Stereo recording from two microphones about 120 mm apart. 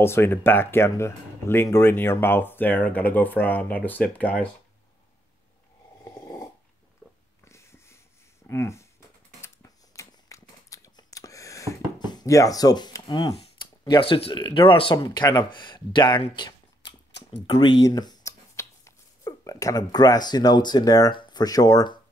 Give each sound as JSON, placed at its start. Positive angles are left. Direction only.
{"t": 0.0, "sound": "speech", "side_deg": 20}
{"t": 7.0, "sound": "pig", "side_deg": -5}
{"t": 7.4, "sound": "wheeze", "side_deg": 25}
{"t": 8.5, "sound": "speech", "side_deg": 25}
{"t": 9.4, "sound": "a sound", "side_deg": 25}
{"t": 13.8, "sound": "speech", "side_deg": 45}
{"t": 15.0, "sound": "speech", "side_deg": 35}
{"t": 17.8, "sound": "a sound", "side_deg": 35}
{"t": 21.2, "sound": "speech", "side_deg": 35}